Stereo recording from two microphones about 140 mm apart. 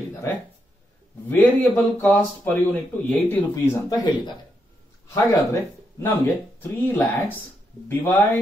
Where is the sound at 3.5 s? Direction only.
30° left (ahead or behind).